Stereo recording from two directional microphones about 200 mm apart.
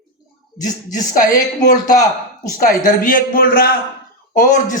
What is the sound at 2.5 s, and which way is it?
A man's voice, 40° left (ahead or behind).